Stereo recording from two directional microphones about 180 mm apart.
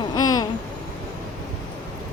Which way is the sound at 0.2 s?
20° left (ahead or behind).